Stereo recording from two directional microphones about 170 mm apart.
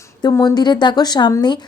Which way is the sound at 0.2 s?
25° left (ahead or behind).